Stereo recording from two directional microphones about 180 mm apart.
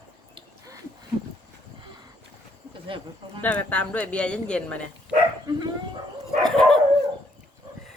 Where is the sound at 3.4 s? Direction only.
10° left (ahead or behind).